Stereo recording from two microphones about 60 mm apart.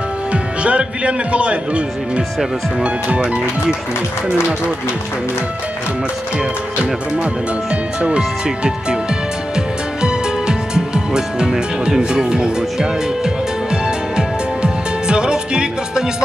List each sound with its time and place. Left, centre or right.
0.3 s a man's voice: centre
7.7 s a man's voice: centre
10.0 s music: centre